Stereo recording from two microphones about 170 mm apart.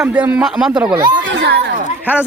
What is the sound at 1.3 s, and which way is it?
Speech, 85° right.